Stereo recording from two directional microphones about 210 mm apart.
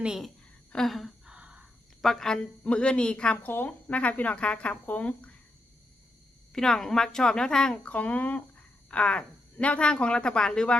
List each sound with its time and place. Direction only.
0.0 s a woman's voice: 5° right (ahead or behind)
6.5 s speech: centre (ahead or behind)